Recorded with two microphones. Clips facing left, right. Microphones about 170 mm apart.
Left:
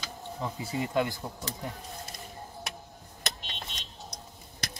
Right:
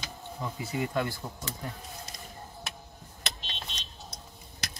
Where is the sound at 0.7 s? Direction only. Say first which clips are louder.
Left 2 dB; 20° left (ahead or behind).